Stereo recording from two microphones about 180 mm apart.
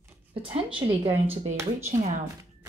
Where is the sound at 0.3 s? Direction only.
30° right (ahead or behind).